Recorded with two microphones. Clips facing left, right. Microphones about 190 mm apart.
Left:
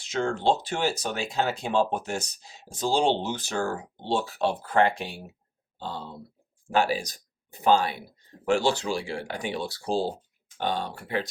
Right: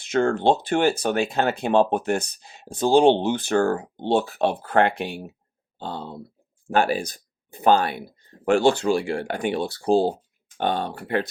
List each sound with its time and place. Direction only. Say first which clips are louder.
0.0 s speech: right 6 dB; 55° right (ahead or behind)